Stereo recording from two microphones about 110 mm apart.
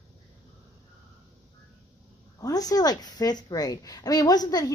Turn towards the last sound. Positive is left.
turn(degrees=40)  # may be behind; listen again after turning